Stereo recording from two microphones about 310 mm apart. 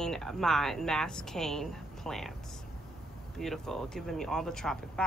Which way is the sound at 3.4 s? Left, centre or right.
Centre.